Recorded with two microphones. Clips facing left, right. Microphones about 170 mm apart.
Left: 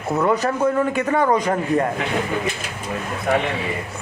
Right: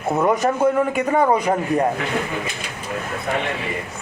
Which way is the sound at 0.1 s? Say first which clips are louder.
Right 1 dB; 20° right (ahead or behind).